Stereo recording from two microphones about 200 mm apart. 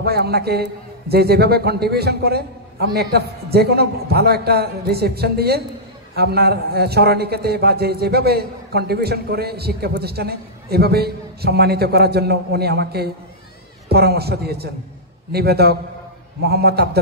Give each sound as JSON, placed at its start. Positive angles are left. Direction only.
{"t": 0.0, "sound": "a man's voice", "side_deg": -50}